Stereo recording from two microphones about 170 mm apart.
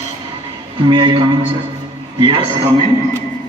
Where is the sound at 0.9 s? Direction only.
30° right (ahead or behind).